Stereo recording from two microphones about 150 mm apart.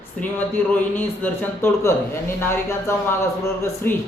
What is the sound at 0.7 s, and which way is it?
Speech, 15° left (ahead or behind).